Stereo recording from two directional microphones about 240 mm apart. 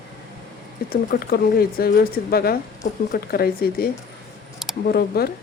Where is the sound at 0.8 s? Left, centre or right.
Left.